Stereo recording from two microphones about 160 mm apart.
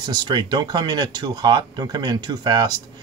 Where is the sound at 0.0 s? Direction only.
25° right (ahead or behind).